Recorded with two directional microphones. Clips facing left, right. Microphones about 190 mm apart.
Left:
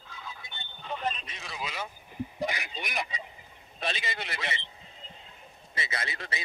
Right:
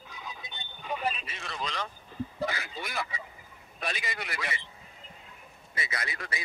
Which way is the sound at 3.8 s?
25° left (ahead or behind).